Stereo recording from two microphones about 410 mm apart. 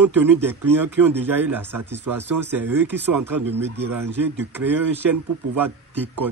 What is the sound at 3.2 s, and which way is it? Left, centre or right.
Speech, right.